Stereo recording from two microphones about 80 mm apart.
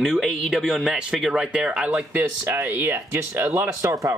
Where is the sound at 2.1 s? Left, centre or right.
Right.